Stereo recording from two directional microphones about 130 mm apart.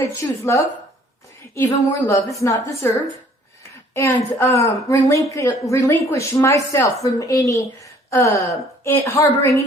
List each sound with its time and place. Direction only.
0.0 s speech: 20° left (ahead or behind)